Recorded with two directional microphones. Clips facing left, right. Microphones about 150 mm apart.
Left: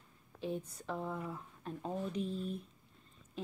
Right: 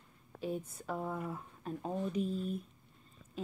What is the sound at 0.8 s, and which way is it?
Speech, 10° right (ahead or behind).